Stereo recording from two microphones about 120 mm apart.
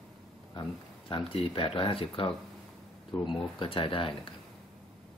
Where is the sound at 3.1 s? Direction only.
35° left (ahead or behind).